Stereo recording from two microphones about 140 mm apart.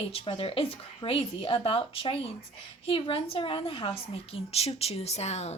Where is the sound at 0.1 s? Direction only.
40° left (ahead or behind).